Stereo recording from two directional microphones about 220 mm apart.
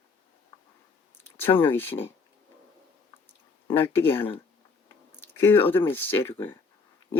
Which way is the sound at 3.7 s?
10° left (ahead or behind).